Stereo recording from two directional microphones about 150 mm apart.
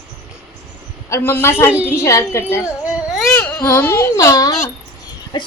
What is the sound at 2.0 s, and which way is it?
A woman's voice, 20° left (ahead or behind).